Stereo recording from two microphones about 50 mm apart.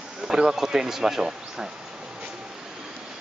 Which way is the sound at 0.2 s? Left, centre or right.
Centre.